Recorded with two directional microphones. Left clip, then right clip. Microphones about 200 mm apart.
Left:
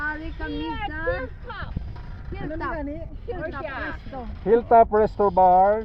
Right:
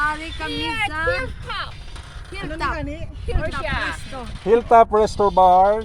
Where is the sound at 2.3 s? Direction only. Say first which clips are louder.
Right 5 dB; 20° right (ahead or behind).